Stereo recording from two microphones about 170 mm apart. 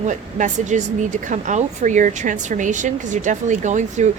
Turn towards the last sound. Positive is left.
turn(degrees=-45)  # may be behind; listen again after turning